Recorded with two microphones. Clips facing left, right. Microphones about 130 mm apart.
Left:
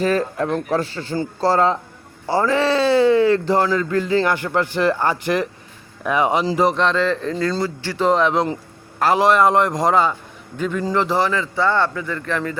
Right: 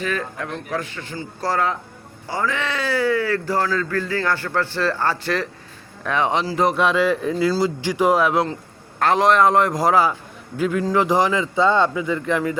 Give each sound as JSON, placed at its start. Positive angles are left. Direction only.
{"t": 0.0, "sound": "a man's voice", "side_deg": 35}
{"t": 6.8, "sound": "speech", "side_deg": -10}
{"t": 9.0, "sound": "a man's voice", "side_deg": 5}
{"t": 11.0, "sound": "speech", "side_deg": -15}